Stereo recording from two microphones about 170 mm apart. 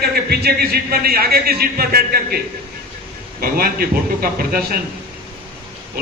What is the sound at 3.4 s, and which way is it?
A man's voice, 60° right (ahead or behind).